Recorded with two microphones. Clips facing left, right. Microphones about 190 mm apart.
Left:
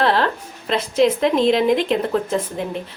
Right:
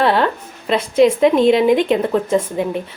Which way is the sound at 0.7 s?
5° right (ahead or behind).